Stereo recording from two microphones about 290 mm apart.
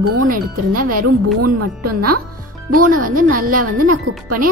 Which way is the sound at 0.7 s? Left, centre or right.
Right.